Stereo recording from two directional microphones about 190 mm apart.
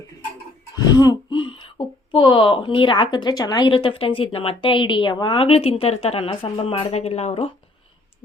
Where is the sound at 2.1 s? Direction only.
25° left (ahead or behind).